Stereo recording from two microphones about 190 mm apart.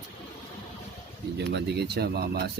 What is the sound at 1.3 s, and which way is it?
Speech, 65° right (ahead or behind).